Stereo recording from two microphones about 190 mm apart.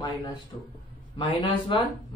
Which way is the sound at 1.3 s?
25° left (ahead or behind).